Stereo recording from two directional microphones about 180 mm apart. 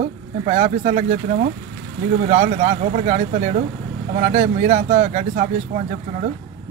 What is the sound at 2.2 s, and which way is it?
Speech, 40° right (ahead or behind).